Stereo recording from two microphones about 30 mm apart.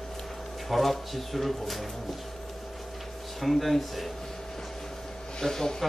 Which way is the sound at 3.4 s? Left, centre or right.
Centre.